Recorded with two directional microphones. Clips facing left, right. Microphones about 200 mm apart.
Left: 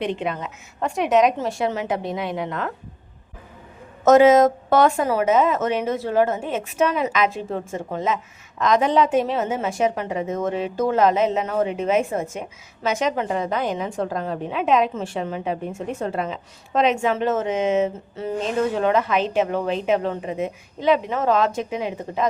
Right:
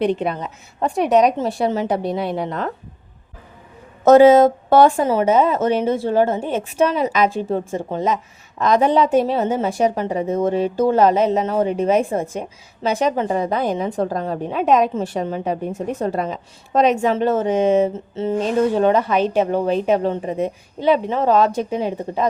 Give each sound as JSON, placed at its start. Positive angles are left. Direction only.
{"t": 0.0, "sound": "speech", "side_deg": -40}
{"t": 4.0, "sound": "speech", "side_deg": -35}